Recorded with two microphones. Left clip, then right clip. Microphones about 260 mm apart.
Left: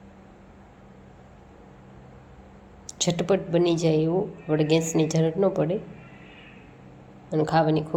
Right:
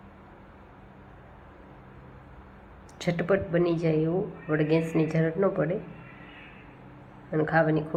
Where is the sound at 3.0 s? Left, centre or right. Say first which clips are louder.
Left 2 dB; left.